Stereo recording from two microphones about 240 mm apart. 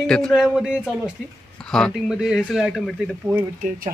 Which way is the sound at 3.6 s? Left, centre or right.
Right.